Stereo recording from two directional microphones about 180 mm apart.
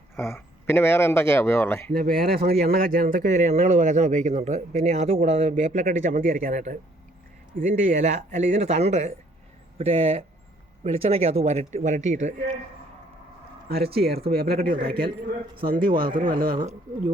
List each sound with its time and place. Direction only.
0.2 s a man's voice: 15° left (ahead or behind)
1.9 s speech: 55° right (ahead or behind); by 12.3 s 40° right (ahead or behind)
13.7 s speech: 60° right (ahead or behind)
15.9 s speech: 30° right (ahead or behind)
16.2 s speech: 50° right (ahead or behind)